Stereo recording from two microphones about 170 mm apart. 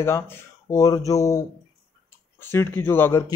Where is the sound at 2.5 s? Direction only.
15° left (ahead or behind).